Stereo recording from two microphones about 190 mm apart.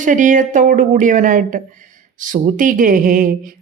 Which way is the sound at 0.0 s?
45° right (ahead or behind).